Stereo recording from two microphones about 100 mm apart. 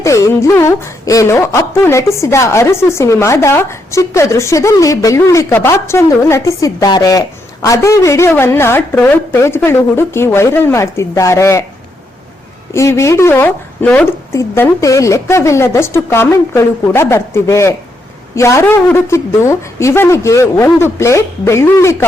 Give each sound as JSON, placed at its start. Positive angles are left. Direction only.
{"t": 0.0, "sound": "a woman's voice", "side_deg": 30}
{"t": 12.7, "sound": "a woman's voice", "side_deg": 30}
{"t": 14.3, "sound": "a woman's voice", "side_deg": 30}